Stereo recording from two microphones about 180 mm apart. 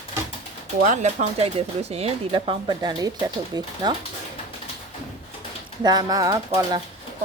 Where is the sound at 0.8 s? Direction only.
40° right (ahead or behind); by 3.7 s 20° right (ahead or behind).